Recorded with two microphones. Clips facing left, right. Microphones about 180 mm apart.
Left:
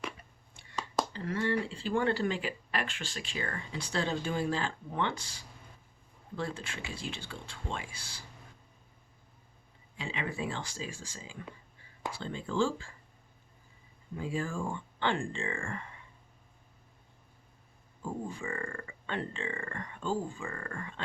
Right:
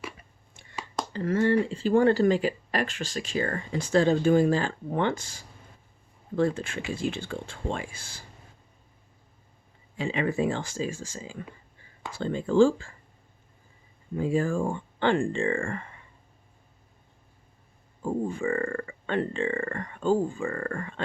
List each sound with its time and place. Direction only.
1.1 s speech: 45° right (ahead or behind)
10.0 s speech: 50° right (ahead or behind)
14.2 s speech: 50° right (ahead or behind)
18.0 s speech: 55° right (ahead or behind)